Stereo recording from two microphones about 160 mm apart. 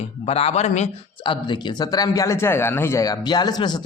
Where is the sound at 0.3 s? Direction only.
40° left (ahead or behind).